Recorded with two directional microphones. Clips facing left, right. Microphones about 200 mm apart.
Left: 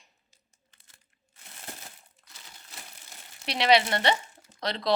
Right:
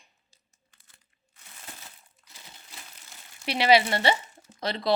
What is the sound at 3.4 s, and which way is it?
Speech, 5° right (ahead or behind).